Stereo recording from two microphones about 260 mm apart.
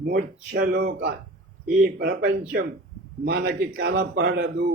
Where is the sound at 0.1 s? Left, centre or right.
Right.